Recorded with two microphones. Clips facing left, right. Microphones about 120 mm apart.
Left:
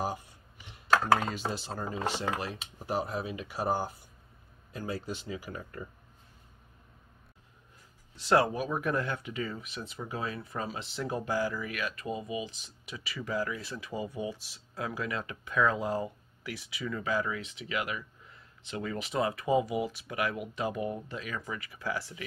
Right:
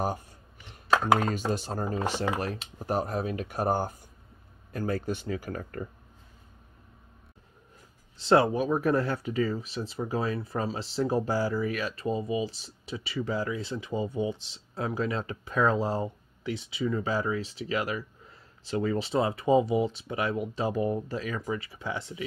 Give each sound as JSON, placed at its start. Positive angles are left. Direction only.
{"t": 0.8, "sound": "chopping", "side_deg": -20}
{"t": 1.2, "sound": "speech", "side_deg": -45}
{"t": 8.2, "sound": "speech", "side_deg": -30}